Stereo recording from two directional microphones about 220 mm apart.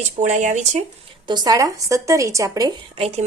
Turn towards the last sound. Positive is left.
turn(degrees=-25)  # may be behind; listen again after turning